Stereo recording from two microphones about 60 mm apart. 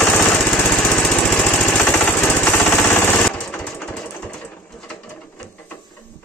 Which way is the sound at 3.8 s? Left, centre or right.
Centre.